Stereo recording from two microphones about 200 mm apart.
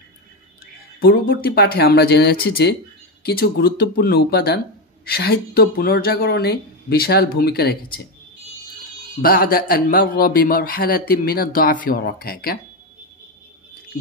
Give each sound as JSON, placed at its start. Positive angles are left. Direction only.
{"t": 0.9, "sound": "a man's voice", "side_deg": 50}
{"t": 9.2, "sound": "a man's voice", "side_deg": 45}